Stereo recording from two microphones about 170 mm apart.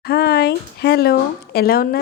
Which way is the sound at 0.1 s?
70° left (ahead or behind).